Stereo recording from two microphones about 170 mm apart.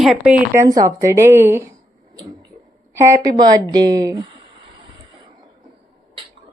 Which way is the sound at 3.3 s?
25° right (ahead or behind).